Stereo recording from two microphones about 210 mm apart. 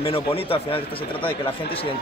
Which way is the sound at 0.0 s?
25° left (ahead or behind).